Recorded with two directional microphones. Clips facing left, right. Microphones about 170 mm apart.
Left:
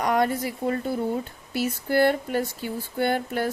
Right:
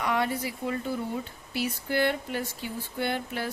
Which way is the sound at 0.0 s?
45° left (ahead or behind).